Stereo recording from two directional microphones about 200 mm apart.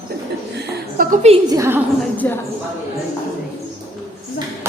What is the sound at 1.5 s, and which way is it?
Speech, 15° right (ahead or behind).